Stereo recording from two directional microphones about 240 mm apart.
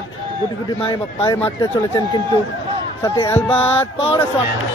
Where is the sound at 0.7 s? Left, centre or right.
Left.